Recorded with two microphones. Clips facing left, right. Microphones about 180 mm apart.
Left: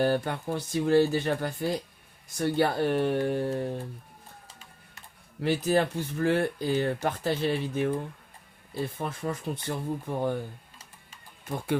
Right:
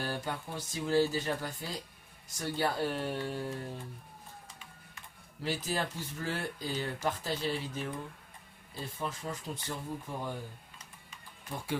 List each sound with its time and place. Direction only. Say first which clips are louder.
0.0 s speech: left 11 dB; 60° left (ahead or behind)
5.4 s speech: left 10 dB; 60° left (ahead or behind)
11.4 s speech: left 7 dB; 55° left (ahead or behind)